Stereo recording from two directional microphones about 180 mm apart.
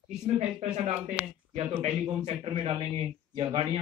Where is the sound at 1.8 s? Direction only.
35° right (ahead or behind).